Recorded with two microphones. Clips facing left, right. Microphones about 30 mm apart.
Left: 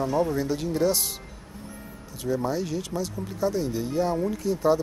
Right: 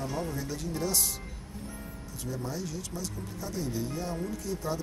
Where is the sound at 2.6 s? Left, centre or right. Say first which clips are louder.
Left 8 dB; left.